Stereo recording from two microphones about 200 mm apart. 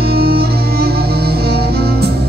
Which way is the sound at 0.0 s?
50° right (ahead or behind).